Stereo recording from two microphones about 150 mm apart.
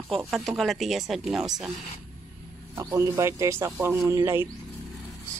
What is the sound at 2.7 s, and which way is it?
Speech, 20° right (ahead or behind).